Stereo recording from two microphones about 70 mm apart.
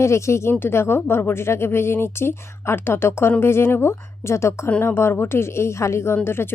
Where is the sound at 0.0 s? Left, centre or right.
Left.